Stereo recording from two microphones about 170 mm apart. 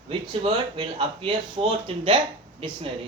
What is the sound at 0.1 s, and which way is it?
Speech, 30° right (ahead or behind).